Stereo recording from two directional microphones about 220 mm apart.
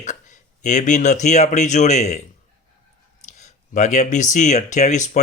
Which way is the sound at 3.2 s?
35° left (ahead or behind).